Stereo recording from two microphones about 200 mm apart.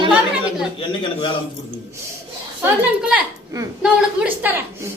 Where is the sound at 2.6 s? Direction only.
5° right (ahead or behind).